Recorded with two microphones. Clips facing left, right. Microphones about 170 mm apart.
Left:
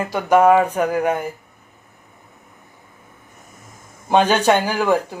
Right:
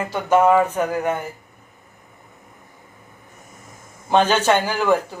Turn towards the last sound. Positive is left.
turn(degrees=15)  # may be behind; listen again after turning